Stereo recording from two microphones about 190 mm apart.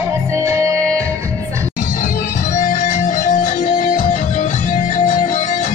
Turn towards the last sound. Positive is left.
turn(degrees=40)  # may be behind; listen again after turning